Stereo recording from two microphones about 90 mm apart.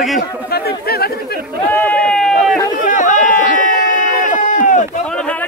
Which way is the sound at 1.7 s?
20° left (ahead or behind).